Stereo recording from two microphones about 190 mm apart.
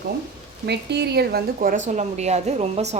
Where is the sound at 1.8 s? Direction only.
35° right (ahead or behind).